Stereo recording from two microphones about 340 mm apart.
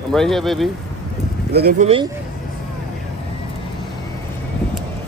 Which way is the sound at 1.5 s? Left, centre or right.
Right.